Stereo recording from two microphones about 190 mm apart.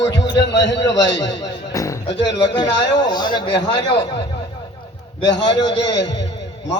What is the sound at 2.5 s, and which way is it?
A man's voice, 20° left (ahead or behind).